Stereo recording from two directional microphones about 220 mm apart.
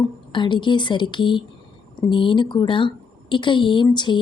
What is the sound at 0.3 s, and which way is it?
A woman's voice, 20° left (ahead or behind).